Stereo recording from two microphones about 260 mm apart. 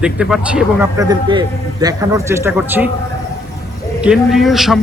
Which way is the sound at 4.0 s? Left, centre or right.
Centre.